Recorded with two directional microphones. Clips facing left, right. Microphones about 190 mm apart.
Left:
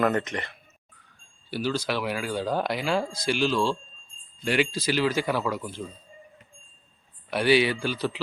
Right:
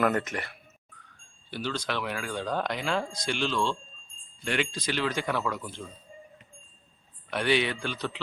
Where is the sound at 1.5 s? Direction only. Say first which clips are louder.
Left 5 dB; 10° left (ahead or behind).